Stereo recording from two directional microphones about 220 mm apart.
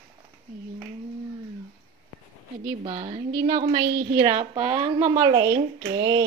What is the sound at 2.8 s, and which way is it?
Speech, 30° right (ahead or behind).